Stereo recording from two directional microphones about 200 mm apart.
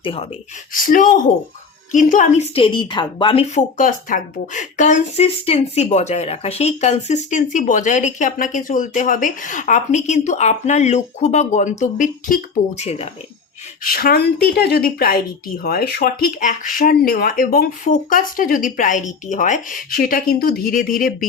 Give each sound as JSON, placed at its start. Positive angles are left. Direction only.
{"t": 0.0, "sound": "a woman's voice", "side_deg": 25}
{"t": 0.7, "sound": "a woman's voice", "side_deg": 40}
{"t": 3.8, "sound": "speech", "side_deg": 40}
{"t": 13.8, "sound": "a woman's voice", "side_deg": 45}